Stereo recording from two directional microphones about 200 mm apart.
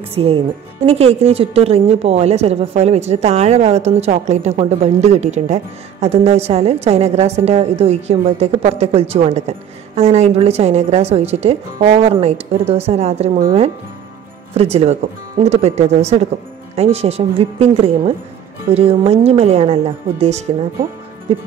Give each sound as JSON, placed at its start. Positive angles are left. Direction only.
{"t": 0.1, "sound": "a woman's voice", "side_deg": -30}